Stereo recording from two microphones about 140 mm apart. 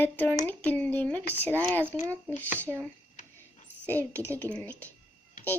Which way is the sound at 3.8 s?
10° left (ahead or behind).